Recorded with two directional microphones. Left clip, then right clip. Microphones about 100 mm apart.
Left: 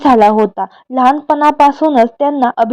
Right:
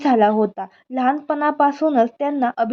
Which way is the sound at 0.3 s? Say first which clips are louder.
Left 8 dB; 35° left (ahead or behind).